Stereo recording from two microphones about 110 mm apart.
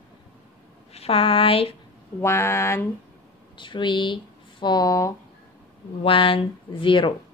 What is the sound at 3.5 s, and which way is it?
Speech, 50° left (ahead or behind).